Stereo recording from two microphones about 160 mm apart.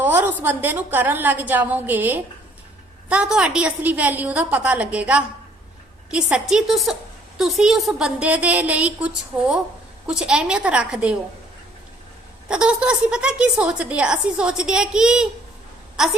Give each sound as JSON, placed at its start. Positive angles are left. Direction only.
{"t": 0.0, "sound": "a sound", "side_deg": -15}
{"t": 0.4, "sound": "a woman's voice", "side_deg": -15}
{"t": 12.5, "sound": "a woman's voice", "side_deg": -5}